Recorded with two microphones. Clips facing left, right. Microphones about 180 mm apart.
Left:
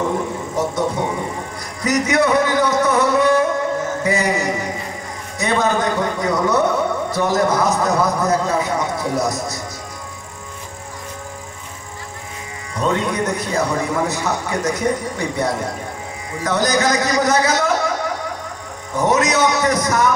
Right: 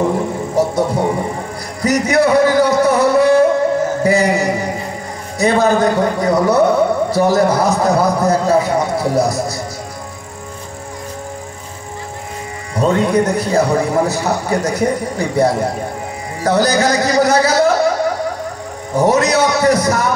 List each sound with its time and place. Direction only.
0.6 s a sound: 30° right (ahead or behind)
1.8 s music: 30° right (ahead or behind)
5.4 s a man's voice: 30° right (ahead or behind)
12.7 s a man's voice: 30° right (ahead or behind)